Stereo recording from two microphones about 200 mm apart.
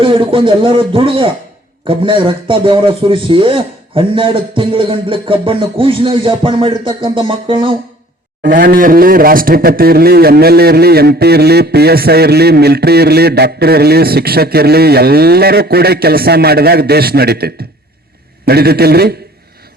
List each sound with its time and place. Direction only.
0.0 s a man's voice: 25° right (ahead or behind)
8.4 s speech: 50° right (ahead or behind)